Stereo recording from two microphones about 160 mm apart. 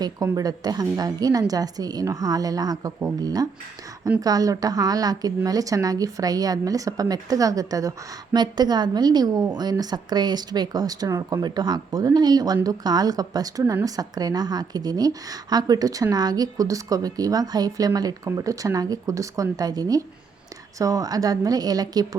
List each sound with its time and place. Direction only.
0.0 s a woman's voice: 25° right (ahead or behind)